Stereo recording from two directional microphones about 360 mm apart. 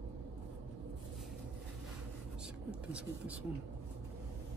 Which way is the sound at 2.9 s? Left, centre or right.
Centre.